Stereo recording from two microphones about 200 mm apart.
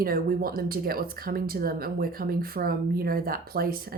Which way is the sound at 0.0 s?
45° right (ahead or behind).